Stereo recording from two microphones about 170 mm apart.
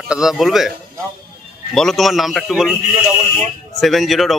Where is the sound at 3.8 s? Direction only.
Centre (ahead or behind).